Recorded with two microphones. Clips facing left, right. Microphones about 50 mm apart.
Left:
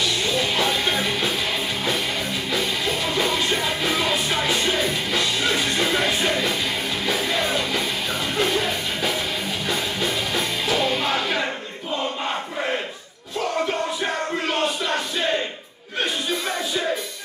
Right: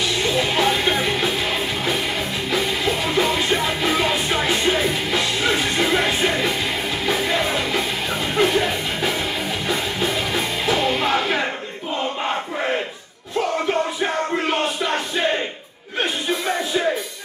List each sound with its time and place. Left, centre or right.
0.2 s music: right
2.5 s music: right